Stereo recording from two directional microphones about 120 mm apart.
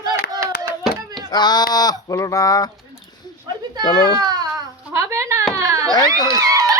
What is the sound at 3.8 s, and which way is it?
Speech, 45° left (ahead or behind).